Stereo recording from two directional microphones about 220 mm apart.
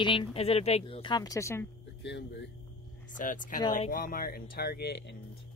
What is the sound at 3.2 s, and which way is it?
Speech, 35° left (ahead or behind).